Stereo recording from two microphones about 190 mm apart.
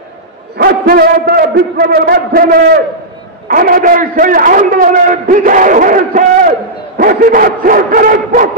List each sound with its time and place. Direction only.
0.6 s a man's voice: 55° right (ahead or behind)